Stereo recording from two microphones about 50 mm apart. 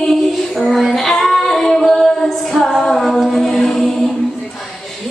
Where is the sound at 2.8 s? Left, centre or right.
Centre.